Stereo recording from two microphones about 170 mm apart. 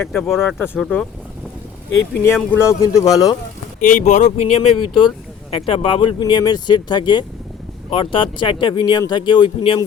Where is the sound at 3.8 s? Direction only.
50° left (ahead or behind); by 9.8 s 30° left (ahead or behind).